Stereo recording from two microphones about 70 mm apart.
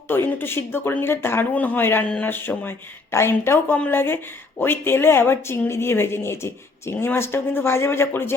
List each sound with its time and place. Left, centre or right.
0.1 s speech: left